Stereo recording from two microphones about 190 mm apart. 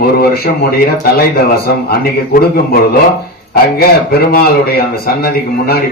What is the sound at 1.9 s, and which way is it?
Speech, 55° left (ahead or behind).